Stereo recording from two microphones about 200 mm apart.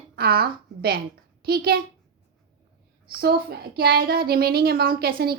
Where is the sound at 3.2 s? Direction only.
50° right (ahead or behind).